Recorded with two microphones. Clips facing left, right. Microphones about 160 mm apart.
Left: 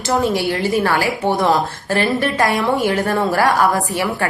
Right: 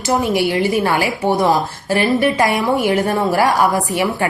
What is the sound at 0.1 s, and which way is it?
A woman's voice, 20° right (ahead or behind).